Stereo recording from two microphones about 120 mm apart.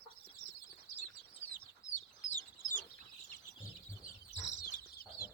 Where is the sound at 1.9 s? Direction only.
90° left.